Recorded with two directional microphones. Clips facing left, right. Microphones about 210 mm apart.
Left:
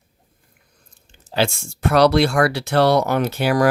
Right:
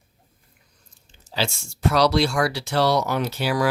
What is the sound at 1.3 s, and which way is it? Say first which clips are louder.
Speech: left 6 dB; 55° left (ahead or behind).